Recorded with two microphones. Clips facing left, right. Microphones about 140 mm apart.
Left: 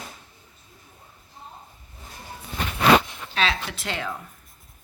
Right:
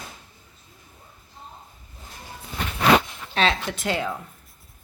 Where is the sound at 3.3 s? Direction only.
40° right (ahead or behind).